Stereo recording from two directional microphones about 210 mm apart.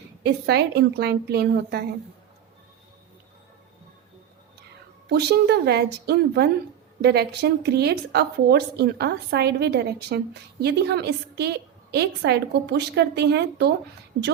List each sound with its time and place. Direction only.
0.2 s a woman's voice: 50° right (ahead or behind)
5.0 s a woman's voice: 50° right (ahead or behind)